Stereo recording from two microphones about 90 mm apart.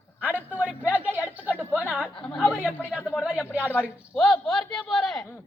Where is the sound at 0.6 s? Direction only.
15° right (ahead or behind).